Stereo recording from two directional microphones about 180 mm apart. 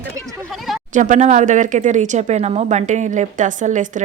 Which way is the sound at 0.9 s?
45° right (ahead or behind).